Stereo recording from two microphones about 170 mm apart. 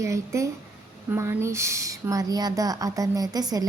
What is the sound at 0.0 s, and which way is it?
A woman's voice, 20° right (ahead or behind).